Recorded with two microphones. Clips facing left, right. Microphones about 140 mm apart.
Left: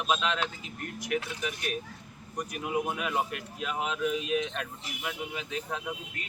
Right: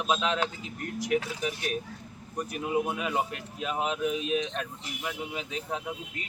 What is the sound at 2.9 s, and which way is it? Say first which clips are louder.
Speech: right 1 dB; 25° right (ahead or behind).